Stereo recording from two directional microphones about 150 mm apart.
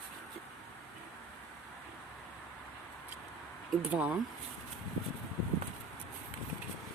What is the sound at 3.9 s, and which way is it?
Speech, 10° right (ahead or behind).